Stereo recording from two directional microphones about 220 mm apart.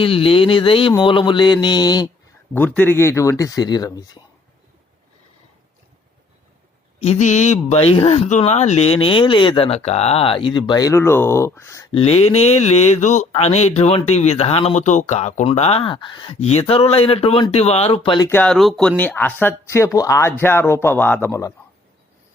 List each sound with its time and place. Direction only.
0.0 s speech: 25° left (ahead or behind)
2.5 s speech: 10° left (ahead or behind)
7.0 s speech: 30° left (ahead or behind); by 11.9 s 15° left (ahead or behind)
11.9 s speech: 25° left (ahead or behind)
18.3 s speech: 5° left (ahead or behind)